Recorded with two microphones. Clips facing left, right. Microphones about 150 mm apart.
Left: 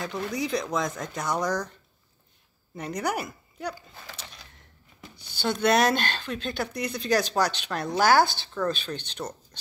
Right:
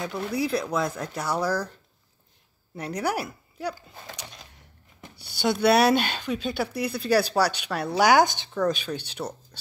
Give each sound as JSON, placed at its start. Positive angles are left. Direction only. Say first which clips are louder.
{"t": 0.0, "sound": "speech", "louder": "right 2 dB", "side_deg": -5}
{"t": 2.7, "sound": "speech", "louder": "right 1 dB", "side_deg": -10}